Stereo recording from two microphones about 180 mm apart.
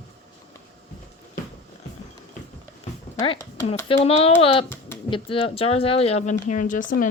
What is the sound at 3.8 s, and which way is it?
Speech, 35° left (ahead or behind).